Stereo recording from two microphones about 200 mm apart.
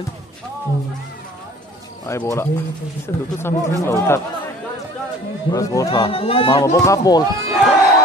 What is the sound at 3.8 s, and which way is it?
Speech, 10° left (ahead or behind).